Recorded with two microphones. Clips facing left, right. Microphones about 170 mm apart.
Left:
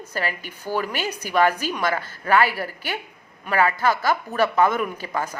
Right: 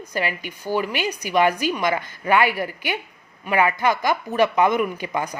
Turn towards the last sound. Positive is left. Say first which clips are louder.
# right 2 dB
turn(degrees=-15)  # may be behind; listen again after turning